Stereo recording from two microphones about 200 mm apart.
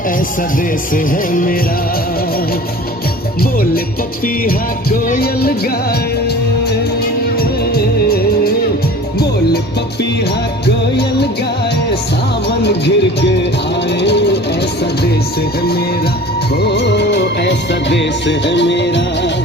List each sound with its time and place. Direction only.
0.9 s music: 45° left (ahead or behind)
4.4 s music: 45° left (ahead or behind)
7.3 s music: 50° left (ahead or behind)
12.5 s music: 55° left (ahead or behind)
16.6 s music: 55° left (ahead or behind)